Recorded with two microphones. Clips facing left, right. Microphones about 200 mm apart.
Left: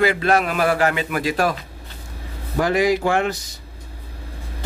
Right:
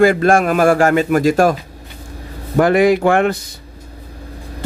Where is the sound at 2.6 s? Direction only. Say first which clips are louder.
Right 6 dB; 55° right (ahead or behind).